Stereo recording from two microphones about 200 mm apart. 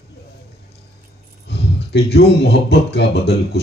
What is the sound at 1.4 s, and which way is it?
Speech, 55° left (ahead or behind).